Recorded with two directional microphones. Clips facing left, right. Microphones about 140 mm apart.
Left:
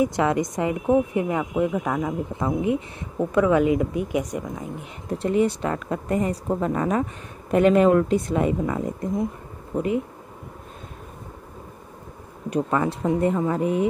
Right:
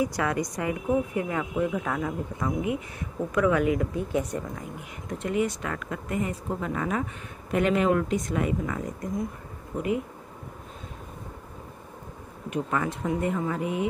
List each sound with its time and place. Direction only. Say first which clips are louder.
0.0 s speech: left 5 dB; 25° left (ahead or behind)
5.0 s speech: left 6 dB; 35° left (ahead or behind)
12.4 s speech: left 5 dB; 35° left (ahead or behind)